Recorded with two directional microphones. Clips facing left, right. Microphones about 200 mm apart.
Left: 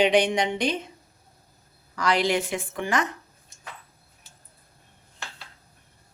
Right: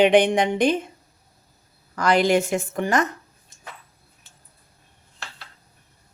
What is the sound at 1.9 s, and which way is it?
A woman's voice, 50° right (ahead or behind).